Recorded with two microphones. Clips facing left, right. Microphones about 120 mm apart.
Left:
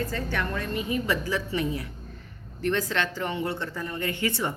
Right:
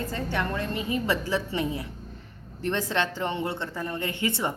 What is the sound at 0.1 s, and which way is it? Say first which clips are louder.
Speech: right 1 dB; 25° right (ahead or behind).